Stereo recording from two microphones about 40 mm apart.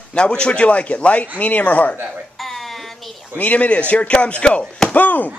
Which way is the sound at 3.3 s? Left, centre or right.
Left.